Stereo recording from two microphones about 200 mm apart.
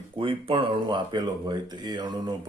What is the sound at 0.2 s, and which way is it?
Speech, 25° right (ahead or behind).